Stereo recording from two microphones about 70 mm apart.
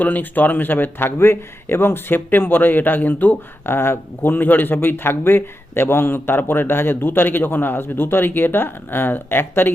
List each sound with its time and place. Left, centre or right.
0.0 s speech: left